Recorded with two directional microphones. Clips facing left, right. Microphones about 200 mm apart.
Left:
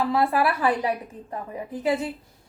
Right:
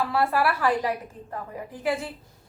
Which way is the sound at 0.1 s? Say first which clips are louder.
Left 2 dB; 20° left (ahead or behind).